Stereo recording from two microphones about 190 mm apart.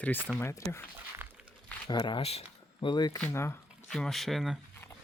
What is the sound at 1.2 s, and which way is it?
Walk, 10° right (ahead or behind).